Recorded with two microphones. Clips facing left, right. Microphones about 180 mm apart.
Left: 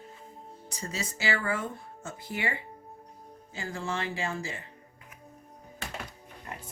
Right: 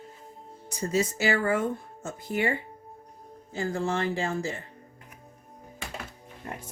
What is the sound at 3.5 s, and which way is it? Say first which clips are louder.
Speech: right 6 dB; 45° right (ahead or behind).